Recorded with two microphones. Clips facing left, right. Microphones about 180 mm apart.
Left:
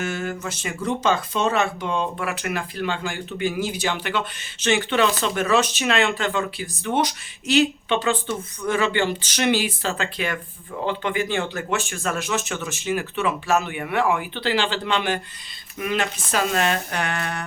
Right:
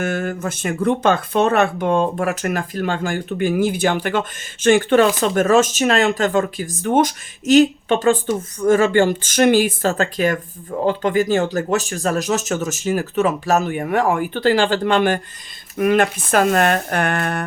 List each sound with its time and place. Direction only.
0.0 s speech: 55° right (ahead or behind)